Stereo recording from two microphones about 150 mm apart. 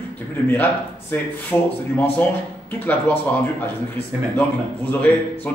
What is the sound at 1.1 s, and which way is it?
A man's voice, 15° left (ahead or behind).